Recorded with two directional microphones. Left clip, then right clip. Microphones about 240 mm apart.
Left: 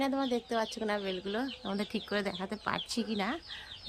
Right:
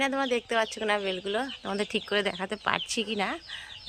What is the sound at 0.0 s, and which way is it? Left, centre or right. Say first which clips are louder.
Speech: right 5 dB; centre.